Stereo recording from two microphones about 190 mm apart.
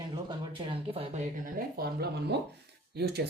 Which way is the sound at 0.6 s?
30° right (ahead or behind).